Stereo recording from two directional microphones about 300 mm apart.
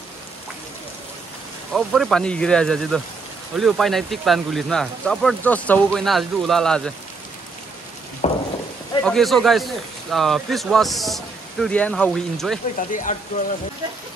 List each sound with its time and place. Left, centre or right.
1.7 s speech: centre
8.2 s a sound: centre
9.0 s speech: centre
12.9 s speech: left